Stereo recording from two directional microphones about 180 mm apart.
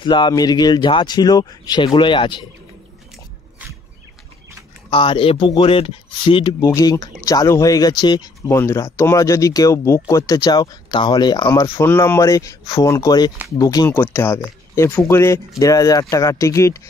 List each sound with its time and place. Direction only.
0.0 s speech: 25° left (ahead or behind)
4.9 s speech: 30° left (ahead or behind)